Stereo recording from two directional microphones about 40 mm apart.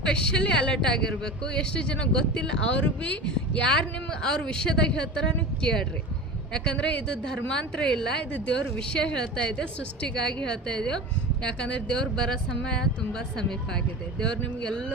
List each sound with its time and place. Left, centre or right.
0.0 s a man's voice: left
7.3 s speech: centre
8.3 s a man's voice: left
12.1 s a man's voice: centre